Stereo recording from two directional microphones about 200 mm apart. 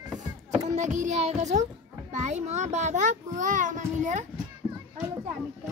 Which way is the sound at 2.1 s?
35° right (ahead or behind).